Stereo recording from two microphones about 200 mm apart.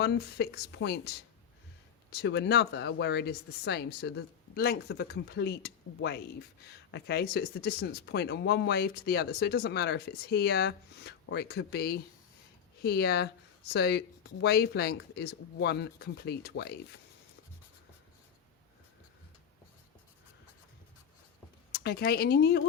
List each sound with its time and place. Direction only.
0.0 s speech: 55° left (ahead or behind)
2.2 s speech: 60° left (ahead or behind)
21.7 s speech: 50° left (ahead or behind)